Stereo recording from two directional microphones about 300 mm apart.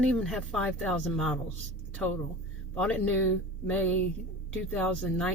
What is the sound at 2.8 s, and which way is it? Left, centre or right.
Speech, centre.